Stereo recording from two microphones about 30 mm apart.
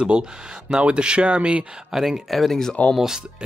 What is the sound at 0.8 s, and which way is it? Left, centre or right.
Speech, right.